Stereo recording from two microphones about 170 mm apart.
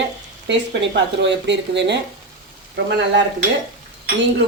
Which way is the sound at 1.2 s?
90° right.